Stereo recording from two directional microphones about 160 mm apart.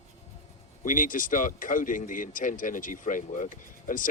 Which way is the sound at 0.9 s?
55° left (ahead or behind).